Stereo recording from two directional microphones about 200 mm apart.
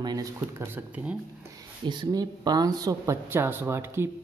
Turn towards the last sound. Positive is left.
turn(degrees=-10)  # may be behind; listen again after turning